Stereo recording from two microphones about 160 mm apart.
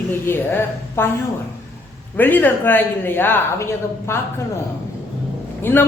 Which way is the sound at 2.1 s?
10° left (ahead or behind).